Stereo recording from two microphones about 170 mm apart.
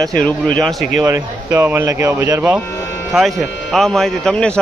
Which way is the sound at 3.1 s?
Centre (ahead or behind).